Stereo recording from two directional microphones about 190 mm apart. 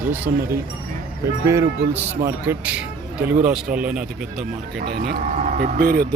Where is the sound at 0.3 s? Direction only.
50° right (ahead or behind).